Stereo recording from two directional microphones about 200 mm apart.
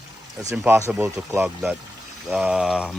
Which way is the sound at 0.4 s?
10° right (ahead or behind).